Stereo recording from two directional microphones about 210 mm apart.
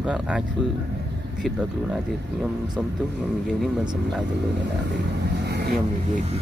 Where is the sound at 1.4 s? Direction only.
5° right (ahead or behind).